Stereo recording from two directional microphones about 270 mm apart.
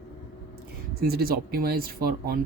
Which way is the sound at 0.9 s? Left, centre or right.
Right.